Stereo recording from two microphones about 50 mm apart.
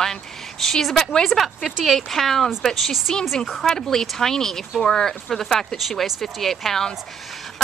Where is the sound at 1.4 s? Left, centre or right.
Centre.